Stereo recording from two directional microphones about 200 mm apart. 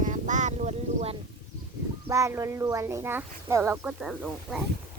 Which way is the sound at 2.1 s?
15° right (ahead or behind).